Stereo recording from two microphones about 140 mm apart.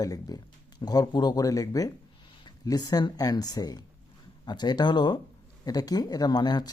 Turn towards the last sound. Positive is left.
turn(degrees=30)  # may be behind; listen again after turning